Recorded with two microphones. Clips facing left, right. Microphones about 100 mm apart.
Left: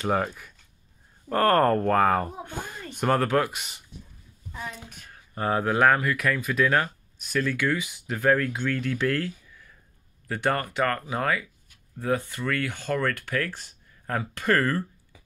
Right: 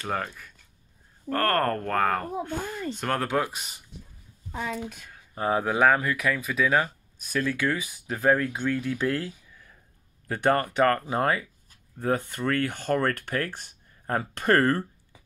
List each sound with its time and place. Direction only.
0.0 s speech: 10° left (ahead or behind)
3.2 s speech: 10° right (ahead or behind)
5.3 s speech: 10° right (ahead or behind)
10.2 s speech: 30° right (ahead or behind); by 13.1 s 45° right (ahead or behind)
13.2 s speech: 20° right (ahead or behind)
14.3 s speech: 45° right (ahead or behind)